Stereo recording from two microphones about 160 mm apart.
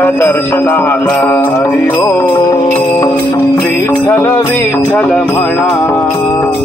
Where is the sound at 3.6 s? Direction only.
10° left (ahead or behind).